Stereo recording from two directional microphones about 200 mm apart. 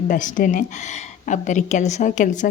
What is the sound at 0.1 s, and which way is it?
A woman's voice, 40° left (ahead or behind).